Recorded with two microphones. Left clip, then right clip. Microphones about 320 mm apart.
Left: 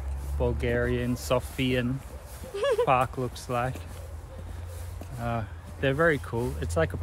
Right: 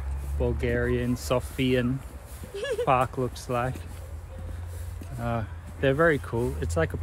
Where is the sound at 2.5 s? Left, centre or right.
Left.